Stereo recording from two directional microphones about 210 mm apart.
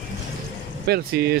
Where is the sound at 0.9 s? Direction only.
50° right (ahead or behind).